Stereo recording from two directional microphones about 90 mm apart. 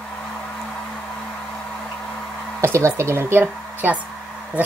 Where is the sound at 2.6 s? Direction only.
30° right (ahead or behind).